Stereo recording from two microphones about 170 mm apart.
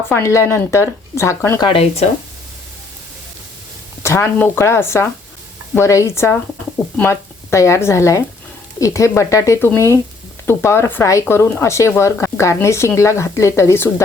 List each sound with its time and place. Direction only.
0.1 s speech: 15° left (ahead or behind)
1.6 s speech: 35° left (ahead or behind)
4.0 s speech: 15° left (ahead or behind)